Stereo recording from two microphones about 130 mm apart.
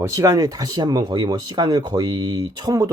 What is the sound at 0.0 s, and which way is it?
Speech, 25° right (ahead or behind).